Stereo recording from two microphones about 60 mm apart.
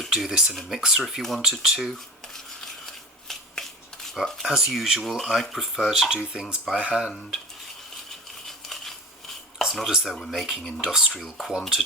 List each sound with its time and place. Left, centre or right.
0.1 s speech: centre
2.2 s a sound: centre
4.5 s speech: centre
5.7 s speech: centre
8.4 s scissors: centre
9.9 s speech: centre